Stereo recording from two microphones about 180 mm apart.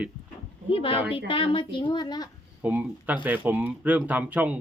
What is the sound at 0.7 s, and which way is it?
A woman's voice, 30° left (ahead or behind).